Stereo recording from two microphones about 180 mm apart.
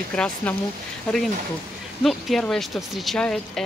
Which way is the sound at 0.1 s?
5° left (ahead or behind).